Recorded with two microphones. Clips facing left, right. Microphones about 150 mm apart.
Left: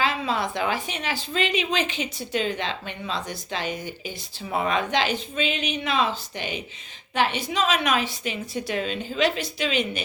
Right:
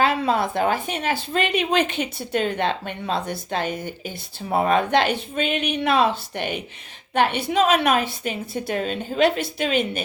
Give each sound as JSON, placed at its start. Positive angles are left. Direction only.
{"t": 0.0, "sound": "a woman's voice", "side_deg": -55}